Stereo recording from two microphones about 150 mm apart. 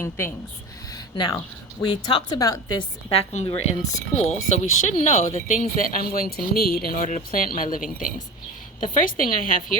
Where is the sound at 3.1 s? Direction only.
45° left (ahead or behind).